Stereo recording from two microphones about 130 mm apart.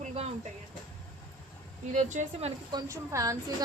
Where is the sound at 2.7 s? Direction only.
25° right (ahead or behind).